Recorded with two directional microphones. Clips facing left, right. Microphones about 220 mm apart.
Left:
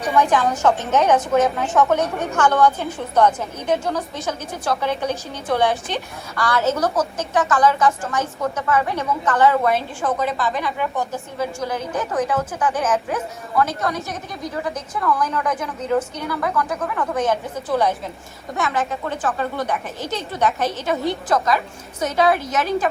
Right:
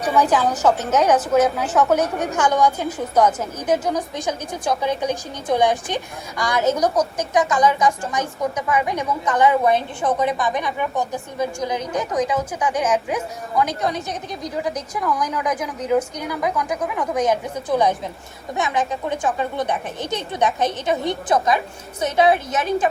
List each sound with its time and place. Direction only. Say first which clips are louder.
0.2 s a woman's voice: left 1 dB; 5° right (ahead or behind); by 22.4 s 25° right (ahead or behind)